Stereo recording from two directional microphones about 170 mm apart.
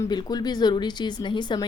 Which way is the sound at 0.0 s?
25° left (ahead or behind).